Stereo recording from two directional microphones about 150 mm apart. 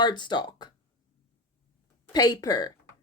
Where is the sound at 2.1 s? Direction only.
25° left (ahead or behind).